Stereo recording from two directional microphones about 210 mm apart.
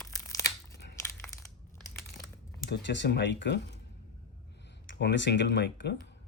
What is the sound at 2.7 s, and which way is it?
Speech, 55° left (ahead or behind).